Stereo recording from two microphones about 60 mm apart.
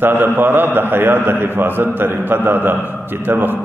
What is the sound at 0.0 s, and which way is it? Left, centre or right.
A man's voice, right.